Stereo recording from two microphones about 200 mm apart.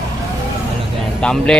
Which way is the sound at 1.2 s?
5° left (ahead or behind).